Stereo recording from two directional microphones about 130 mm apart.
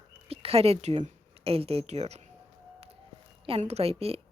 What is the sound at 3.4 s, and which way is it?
Speech, 50° right (ahead or behind).